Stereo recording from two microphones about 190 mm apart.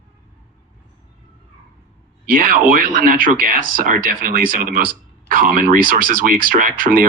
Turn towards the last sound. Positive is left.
turn(degrees=-45)  # may be behind; listen again after turning